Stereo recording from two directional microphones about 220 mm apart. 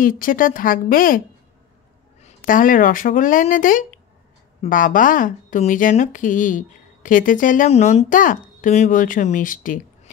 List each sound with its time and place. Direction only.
0.0 s speech: 40° left (ahead or behind)
2.2 s speech: 40° left (ahead or behind)